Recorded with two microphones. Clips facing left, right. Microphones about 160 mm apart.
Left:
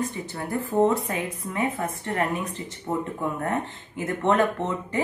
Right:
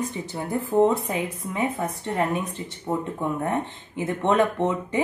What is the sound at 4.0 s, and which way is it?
A woman's voice, 15° right (ahead or behind).